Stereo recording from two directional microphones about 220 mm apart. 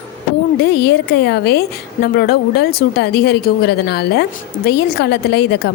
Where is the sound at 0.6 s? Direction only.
50° left (ahead or behind).